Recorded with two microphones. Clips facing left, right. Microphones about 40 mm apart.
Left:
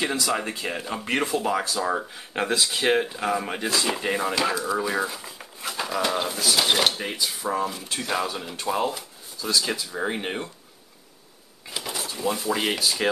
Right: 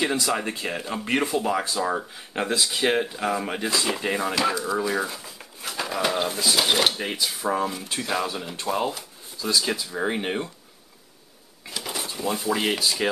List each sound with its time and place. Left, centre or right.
0.1 s speech: centre
0.4 s speech: centre
1.6 s speech: centre
1.9 s speech: centre
5.9 s speech: centre
12.2 s speech: centre